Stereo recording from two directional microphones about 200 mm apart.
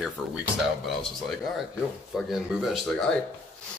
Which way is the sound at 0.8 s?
Centre (ahead or behind).